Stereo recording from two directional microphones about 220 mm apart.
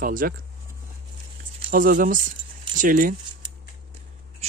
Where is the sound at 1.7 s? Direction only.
40° right (ahead or behind).